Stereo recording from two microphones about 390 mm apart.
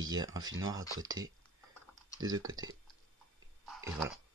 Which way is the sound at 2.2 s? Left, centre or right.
Centre.